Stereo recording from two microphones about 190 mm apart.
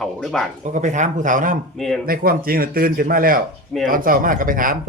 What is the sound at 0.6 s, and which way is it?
Speech, 40° right (ahead or behind).